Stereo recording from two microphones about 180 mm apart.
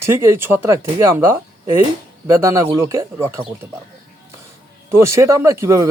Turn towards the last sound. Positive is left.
turn(degrees=-15)  # may be behind; listen again after turning